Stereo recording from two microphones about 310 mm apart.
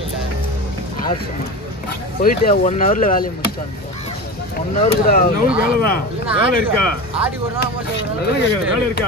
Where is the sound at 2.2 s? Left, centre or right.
Left.